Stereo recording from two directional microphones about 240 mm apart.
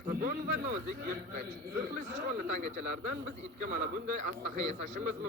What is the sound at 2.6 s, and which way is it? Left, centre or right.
A man's voice, right.